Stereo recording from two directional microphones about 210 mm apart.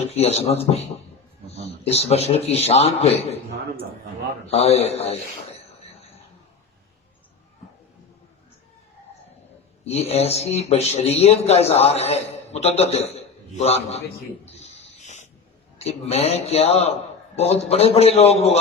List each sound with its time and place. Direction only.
0.1 s a man's voice: 30° left (ahead or behind)
4.5 s a man's voice: 30° left (ahead or behind)
9.8 s a man's voice: 30° left (ahead or behind)
14.4 s a sound: 30° left (ahead or behind)
15.8 s a man's voice: 30° left (ahead or behind)